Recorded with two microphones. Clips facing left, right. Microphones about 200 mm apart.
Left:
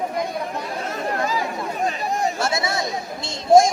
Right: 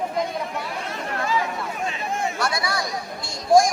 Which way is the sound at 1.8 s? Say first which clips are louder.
Left 4 dB; 40° left (ahead or behind).